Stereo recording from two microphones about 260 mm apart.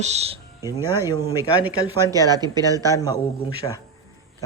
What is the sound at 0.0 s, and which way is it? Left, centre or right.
Speech, right.